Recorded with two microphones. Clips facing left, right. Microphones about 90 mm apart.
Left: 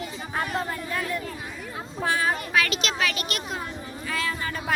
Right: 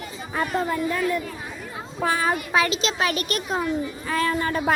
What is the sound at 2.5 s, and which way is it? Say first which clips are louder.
A woman's voice: right 3 dB; 25° right (ahead or behind).